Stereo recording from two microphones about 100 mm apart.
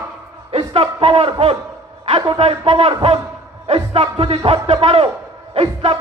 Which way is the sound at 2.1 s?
60° right (ahead or behind).